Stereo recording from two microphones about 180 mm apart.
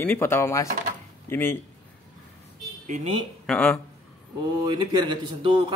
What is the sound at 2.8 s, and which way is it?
Speech, 45° right (ahead or behind).